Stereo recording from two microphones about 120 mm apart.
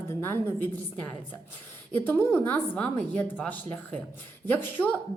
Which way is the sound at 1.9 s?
15° left (ahead or behind).